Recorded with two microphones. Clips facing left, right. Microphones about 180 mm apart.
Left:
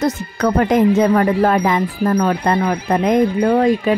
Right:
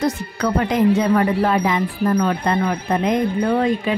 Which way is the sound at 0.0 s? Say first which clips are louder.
Left 3 dB; 50° left (ahead or behind).